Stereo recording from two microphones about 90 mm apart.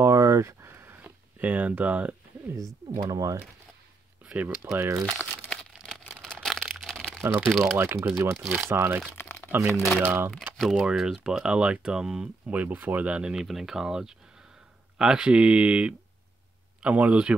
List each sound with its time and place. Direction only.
0.0 s a sound: 30° right (ahead or behind); by 2.1 s 15° right (ahead or behind)
3.1 s speech: 40° right (ahead or behind)
4.2 s speech: 10° right (ahead or behind)
4.7 s speech: 30° right (ahead or behind)
5.0 s speech: 20° left (ahead or behind)
6.3 s crumpling: 5° left (ahead or behind)
7.6 s speech: 25° right (ahead or behind)
9.1 s crumpling: 25° left (ahead or behind)
10.0 s speech: 25° right (ahead or behind)
10.6 s speech: 10° right (ahead or behind)